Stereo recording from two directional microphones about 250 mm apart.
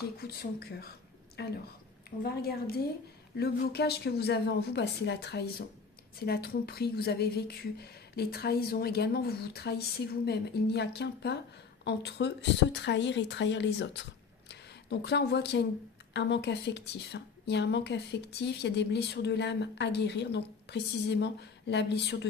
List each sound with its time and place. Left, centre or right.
0.2 s speech: left